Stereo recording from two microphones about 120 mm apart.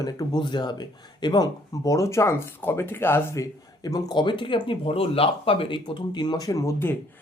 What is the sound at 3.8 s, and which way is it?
Speech, 35° left (ahead or behind).